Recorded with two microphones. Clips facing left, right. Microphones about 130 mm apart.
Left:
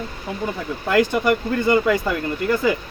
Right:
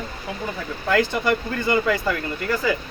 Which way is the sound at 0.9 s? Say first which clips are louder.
Left 3 dB; 15° left (ahead or behind).